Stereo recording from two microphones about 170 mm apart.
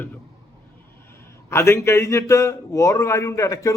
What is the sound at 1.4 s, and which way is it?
A man's voice, 15° left (ahead or behind).